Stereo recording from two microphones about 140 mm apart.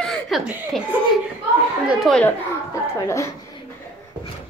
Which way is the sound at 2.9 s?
20° left (ahead or behind).